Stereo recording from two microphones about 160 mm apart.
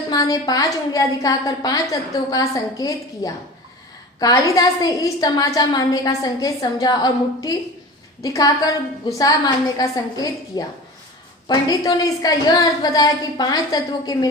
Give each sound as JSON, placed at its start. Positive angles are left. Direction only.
{"t": 0.1, "sound": "a woman's voice", "side_deg": 25}